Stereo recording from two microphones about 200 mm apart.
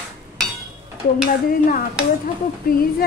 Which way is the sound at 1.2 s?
45° left (ahead or behind).